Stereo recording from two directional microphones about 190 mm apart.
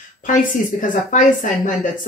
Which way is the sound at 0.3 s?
45° left (ahead or behind).